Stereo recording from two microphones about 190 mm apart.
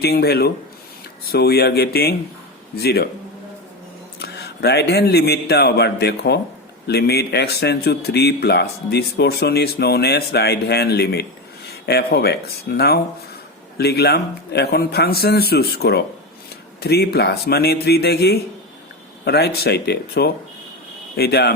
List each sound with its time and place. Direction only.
0.0 s speech: 55° left (ahead or behind)
4.2 s a man's voice: 60° left (ahead or behind)